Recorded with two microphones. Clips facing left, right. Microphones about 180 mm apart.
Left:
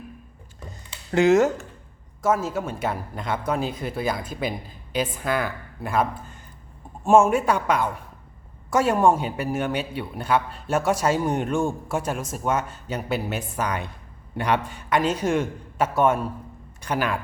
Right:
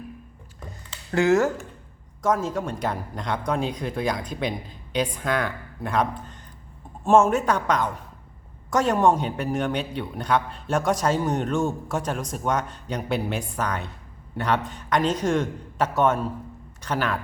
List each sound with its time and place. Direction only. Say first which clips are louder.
1.1 s speech: left 2 dB; 20° left (ahead or behind)
2.2 s a man's voice: left 1 dB; 5° left (ahead or behind)